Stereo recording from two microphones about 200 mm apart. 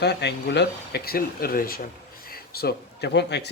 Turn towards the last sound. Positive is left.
turn(degrees=55)  # may be behind; listen again after turning